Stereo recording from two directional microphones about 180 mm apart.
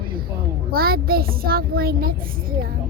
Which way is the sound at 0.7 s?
55° right (ahead or behind).